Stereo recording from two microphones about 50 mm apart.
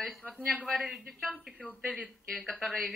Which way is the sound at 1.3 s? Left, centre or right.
Left.